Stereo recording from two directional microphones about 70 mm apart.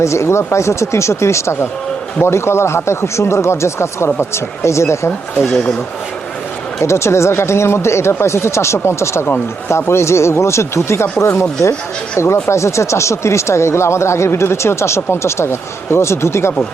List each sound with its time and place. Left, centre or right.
0.0 s speech: left
6.8 s speech: left